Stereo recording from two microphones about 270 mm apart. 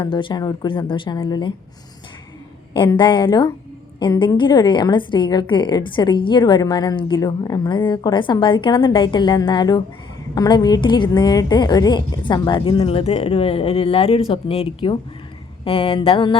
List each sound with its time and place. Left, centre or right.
0.0 s a woman's voice: centre
2.7 s a woman's voice: centre